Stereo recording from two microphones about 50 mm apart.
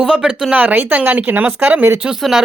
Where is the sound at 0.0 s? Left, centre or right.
Centre.